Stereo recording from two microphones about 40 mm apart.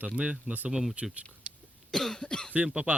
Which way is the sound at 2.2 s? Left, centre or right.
Centre.